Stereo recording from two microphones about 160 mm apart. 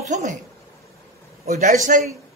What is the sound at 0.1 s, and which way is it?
Speech, 50° right (ahead or behind).